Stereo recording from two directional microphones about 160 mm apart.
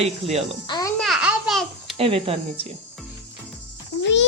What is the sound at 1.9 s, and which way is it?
Speech, 35° right (ahead or behind).